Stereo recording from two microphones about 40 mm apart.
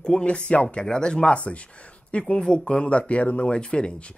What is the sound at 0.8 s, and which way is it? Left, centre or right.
Speech, centre.